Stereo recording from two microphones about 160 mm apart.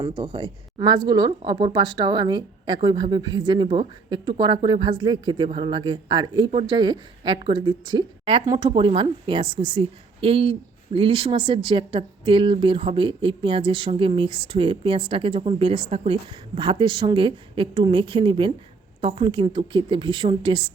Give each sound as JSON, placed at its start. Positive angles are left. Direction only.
{"t": 0.0, "sound": "a woman's voice", "side_deg": -35}
{"t": 5.5, "sound": "speech", "side_deg": -45}
{"t": 5.7, "sound": "a woman's voice", "side_deg": -30}